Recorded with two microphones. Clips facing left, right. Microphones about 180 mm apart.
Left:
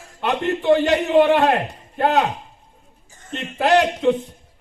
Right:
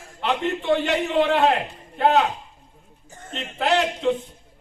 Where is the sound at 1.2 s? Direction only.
65° left (ahead or behind).